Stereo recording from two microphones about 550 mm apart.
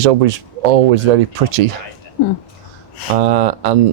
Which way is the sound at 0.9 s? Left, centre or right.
Right.